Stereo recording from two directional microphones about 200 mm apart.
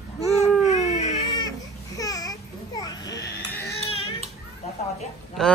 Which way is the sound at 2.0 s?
15° left (ahead or behind).